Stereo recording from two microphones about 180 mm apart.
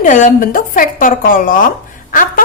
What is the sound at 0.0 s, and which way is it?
A woman's voice, 45° left (ahead or behind).